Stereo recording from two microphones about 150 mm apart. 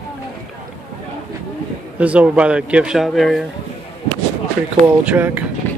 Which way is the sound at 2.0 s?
10° right (ahead or behind).